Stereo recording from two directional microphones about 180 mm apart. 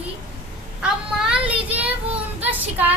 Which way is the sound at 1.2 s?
5° right (ahead or behind).